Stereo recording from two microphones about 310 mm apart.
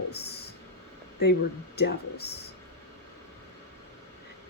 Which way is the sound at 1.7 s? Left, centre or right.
Left.